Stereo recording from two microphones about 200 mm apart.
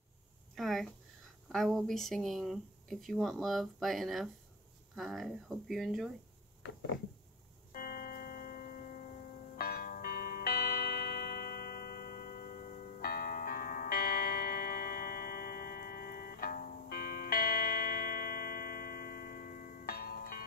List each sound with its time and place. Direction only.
0.6 s a sound: centre (ahead or behind)
1.5 s speech: centre (ahead or behind)
7.7 s music: 45° left (ahead or behind)